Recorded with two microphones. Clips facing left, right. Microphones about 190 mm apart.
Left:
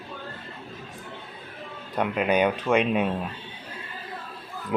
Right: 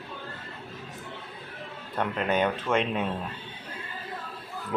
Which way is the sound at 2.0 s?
15° left (ahead or behind).